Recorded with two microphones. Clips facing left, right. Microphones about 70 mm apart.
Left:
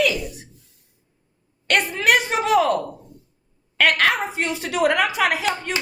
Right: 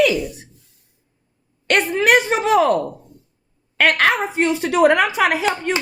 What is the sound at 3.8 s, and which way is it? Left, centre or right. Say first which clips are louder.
A woman's voice: right 2 dB; right.